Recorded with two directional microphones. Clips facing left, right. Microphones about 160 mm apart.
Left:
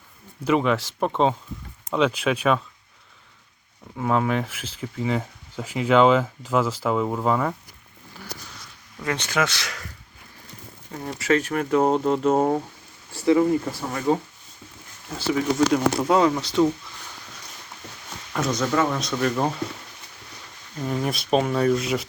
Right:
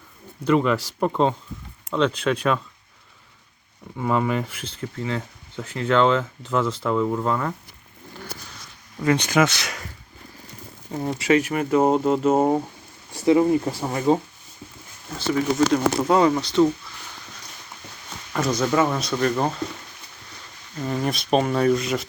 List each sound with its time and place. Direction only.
0.4 s speech: 5° left (ahead or behind)
3.9 s speech: 5° left (ahead or behind)
9.1 s speech: 15° right (ahead or behind)
10.9 s speech: 25° right (ahead or behind)
11.3 s speech: 10° right (ahead or behind)
13.1 s speech: 20° right (ahead or behind)
15.3 s speech: 5° left (ahead or behind)
18.6 s speech: 5° right (ahead or behind)
20.7 s speech: centre (ahead or behind)